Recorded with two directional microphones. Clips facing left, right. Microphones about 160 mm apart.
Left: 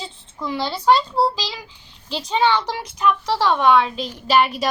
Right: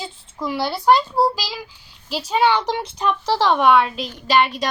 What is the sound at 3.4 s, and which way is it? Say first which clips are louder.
A woman's voice: right 2 dB; 15° right (ahead or behind).